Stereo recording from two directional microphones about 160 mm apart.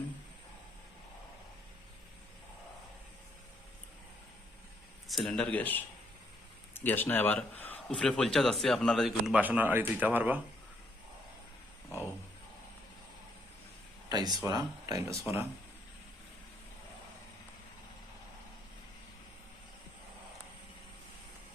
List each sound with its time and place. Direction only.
5.0 s speech: centre (ahead or behind)
14.1 s speech: 25° right (ahead or behind)